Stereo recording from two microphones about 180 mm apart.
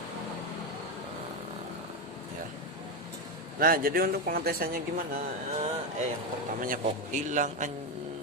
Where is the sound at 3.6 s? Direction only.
55° right (ahead or behind).